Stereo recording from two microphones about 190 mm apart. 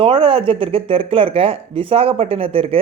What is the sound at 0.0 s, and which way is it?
Speech, 30° right (ahead or behind).